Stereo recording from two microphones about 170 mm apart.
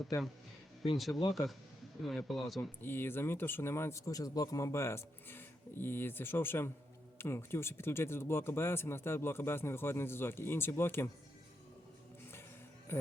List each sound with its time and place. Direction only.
0.1 s speech: 20° left (ahead or behind)
0.9 s a man's voice: centre (ahead or behind)
2.8 s speech: 10° left (ahead or behind)
12.9 s speech: 15° left (ahead or behind)